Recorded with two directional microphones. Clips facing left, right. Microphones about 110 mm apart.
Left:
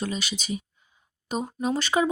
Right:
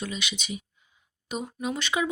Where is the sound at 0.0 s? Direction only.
40° left (ahead or behind).